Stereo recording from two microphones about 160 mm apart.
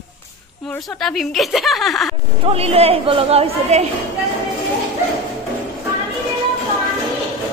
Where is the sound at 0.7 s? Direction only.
Centre (ahead or behind).